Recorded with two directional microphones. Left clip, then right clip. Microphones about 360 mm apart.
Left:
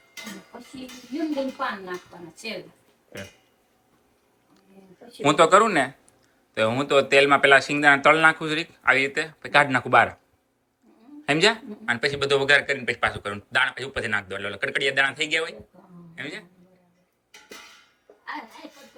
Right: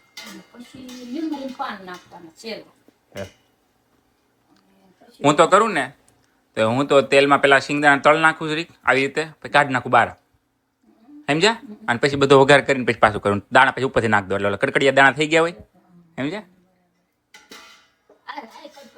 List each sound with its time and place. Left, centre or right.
5.2 s speech: centre
11.3 s speech: centre